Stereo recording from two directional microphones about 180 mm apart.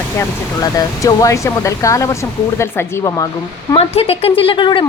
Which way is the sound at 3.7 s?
35° left (ahead or behind).